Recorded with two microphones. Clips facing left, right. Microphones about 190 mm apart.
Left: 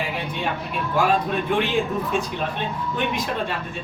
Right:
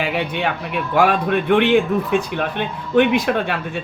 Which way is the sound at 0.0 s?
75° right (ahead or behind).